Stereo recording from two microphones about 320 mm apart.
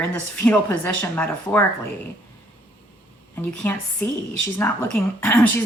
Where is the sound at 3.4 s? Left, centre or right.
Centre.